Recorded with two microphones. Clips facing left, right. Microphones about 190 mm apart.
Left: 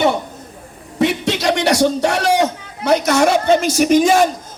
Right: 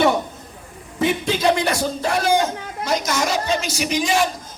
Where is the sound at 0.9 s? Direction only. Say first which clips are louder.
Left 3 dB; 80° left.